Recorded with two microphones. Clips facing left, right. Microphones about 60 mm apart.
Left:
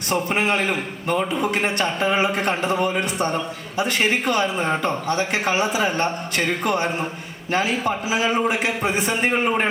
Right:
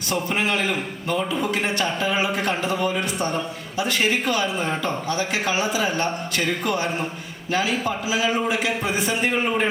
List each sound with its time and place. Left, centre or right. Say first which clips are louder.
0.1 s a man's voice: left 2 dB; left